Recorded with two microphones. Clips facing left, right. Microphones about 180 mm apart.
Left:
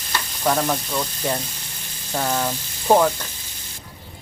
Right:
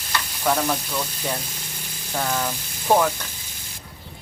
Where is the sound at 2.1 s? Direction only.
10° left (ahead or behind).